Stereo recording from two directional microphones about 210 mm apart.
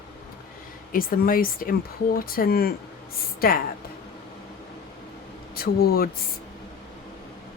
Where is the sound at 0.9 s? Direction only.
45° left (ahead or behind).